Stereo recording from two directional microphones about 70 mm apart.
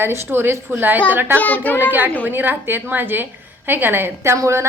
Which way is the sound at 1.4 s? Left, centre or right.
Left.